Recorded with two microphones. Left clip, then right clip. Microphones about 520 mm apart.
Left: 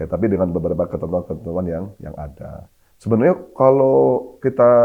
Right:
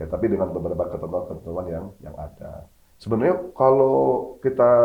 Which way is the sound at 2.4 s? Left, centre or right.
Left.